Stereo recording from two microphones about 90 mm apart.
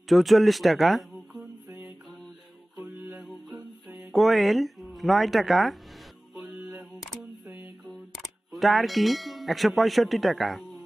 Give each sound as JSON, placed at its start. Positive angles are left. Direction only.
{"t": 0.1, "sound": "speech", "side_deg": 0}
{"t": 2.8, "sound": "music", "side_deg": -5}
{"t": 7.4, "sound": "a sound", "side_deg": -25}
{"t": 8.5, "sound": "clang", "side_deg": 0}